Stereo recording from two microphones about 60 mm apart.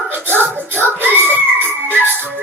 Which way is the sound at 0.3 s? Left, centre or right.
Right.